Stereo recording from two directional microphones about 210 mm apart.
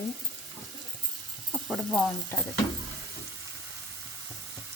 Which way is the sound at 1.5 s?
5° left (ahead or behind).